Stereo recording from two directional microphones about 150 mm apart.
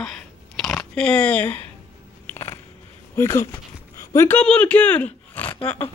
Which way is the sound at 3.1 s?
20° left (ahead or behind).